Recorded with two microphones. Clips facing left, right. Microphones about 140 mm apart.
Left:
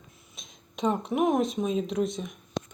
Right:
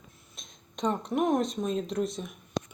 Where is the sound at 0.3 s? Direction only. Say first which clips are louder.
Left 2 dB; centre (ahead or behind).